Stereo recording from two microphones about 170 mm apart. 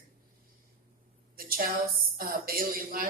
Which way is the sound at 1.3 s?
60° right (ahead or behind).